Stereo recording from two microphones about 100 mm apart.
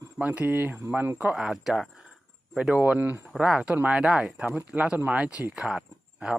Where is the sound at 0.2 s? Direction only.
15° right (ahead or behind).